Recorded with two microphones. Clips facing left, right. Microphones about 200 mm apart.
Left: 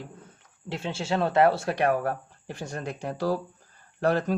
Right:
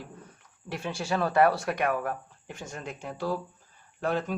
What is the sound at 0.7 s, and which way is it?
Speech, 25° left (ahead or behind).